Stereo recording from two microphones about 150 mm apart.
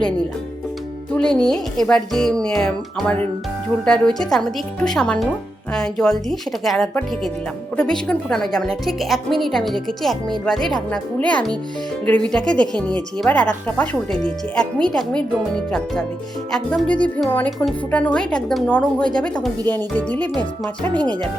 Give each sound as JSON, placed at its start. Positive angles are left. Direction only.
{"t": 1.1, "sound": "a woman's voice", "side_deg": 5}
{"t": 20.9, "sound": "speech", "side_deg": -30}